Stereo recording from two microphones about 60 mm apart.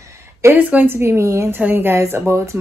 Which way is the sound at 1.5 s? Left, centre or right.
Right.